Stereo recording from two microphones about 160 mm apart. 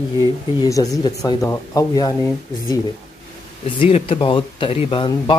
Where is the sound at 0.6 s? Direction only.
20° left (ahead or behind).